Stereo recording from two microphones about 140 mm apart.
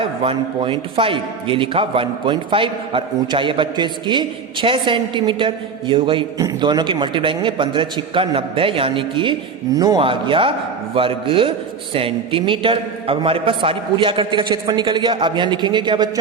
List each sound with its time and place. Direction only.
0.0 s a man's voice: 40° right (ahead or behind)